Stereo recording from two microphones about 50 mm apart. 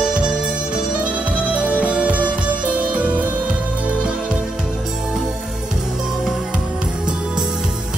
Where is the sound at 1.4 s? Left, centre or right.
Right.